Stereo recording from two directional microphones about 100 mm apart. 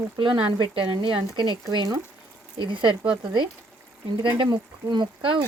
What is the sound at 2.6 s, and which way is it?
Speech, 55° right (ahead or behind).